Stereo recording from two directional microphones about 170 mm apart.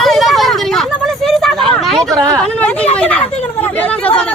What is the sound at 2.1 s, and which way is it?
Speech, 20° right (ahead or behind).